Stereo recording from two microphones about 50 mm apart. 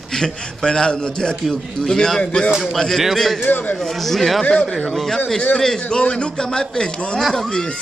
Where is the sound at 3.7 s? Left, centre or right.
Centre.